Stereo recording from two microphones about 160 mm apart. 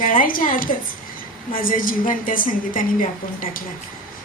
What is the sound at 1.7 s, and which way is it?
A woman's voice, 60° left (ahead or behind).